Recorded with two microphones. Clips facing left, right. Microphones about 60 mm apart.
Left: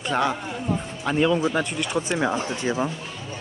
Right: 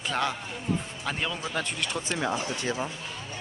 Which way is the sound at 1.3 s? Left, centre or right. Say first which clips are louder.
Left 8 dB; centre.